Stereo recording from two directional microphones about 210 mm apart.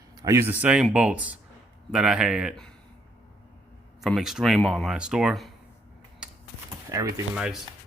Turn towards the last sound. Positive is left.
turn(degrees=-5)  # may be behind; listen again after turning